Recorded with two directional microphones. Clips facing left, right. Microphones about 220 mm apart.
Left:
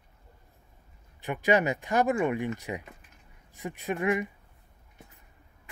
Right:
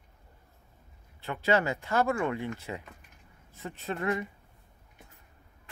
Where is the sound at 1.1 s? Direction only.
15° left (ahead or behind).